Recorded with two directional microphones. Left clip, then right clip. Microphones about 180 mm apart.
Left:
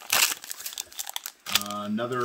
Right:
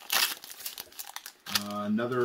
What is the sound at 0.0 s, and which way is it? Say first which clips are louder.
Crumpling: left 4 dB; 25° left (ahead or behind).